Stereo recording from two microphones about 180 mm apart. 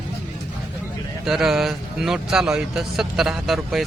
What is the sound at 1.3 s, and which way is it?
Speech, centre (ahead or behind).